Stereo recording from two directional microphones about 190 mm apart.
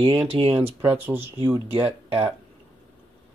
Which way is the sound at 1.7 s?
30° right (ahead or behind).